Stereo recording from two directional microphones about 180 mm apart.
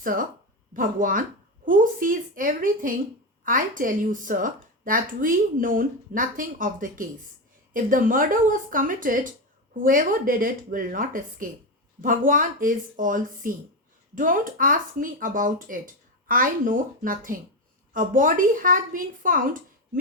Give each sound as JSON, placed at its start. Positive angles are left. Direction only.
{"t": 0.0, "sound": "speech", "side_deg": -50}